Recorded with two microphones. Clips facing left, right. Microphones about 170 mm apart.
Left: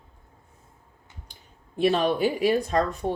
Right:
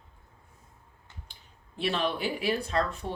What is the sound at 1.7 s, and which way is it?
Speech, 45° left (ahead or behind).